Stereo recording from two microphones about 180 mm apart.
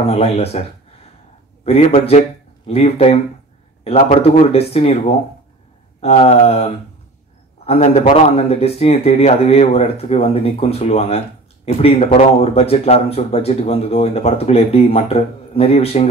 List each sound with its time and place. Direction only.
0.0 s speech: 35° left (ahead or behind)
5.9 s speech: 35° left (ahead or behind)